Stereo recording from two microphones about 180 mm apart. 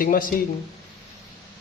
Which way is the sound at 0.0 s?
50° left (ahead or behind).